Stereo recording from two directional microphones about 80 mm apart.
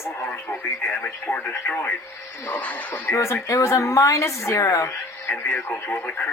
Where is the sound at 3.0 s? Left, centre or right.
Left.